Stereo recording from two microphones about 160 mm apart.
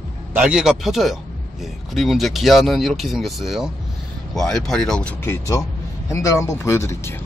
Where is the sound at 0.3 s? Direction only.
5° right (ahead or behind); by 7.2 s 15° left (ahead or behind).